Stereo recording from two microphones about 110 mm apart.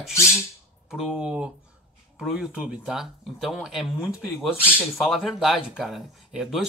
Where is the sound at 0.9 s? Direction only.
5° right (ahead or behind).